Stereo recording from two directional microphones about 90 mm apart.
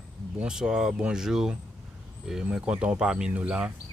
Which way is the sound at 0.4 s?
10° right (ahead or behind).